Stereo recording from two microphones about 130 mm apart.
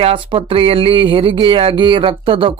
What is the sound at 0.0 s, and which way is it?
Speech, 45° right (ahead or behind).